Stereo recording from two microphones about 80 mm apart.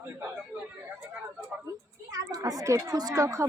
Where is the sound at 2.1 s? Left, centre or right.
Right.